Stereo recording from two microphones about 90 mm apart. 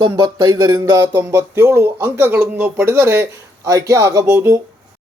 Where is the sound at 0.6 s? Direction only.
30° right (ahead or behind).